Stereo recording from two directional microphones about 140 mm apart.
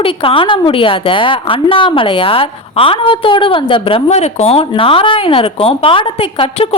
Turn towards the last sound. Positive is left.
turn(degrees=40)  # may be behind; listen again after turning